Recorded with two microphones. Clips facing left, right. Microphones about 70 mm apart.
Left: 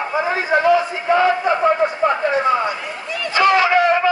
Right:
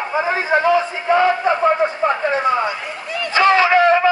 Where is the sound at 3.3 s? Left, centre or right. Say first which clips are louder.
Right 1 dB; right.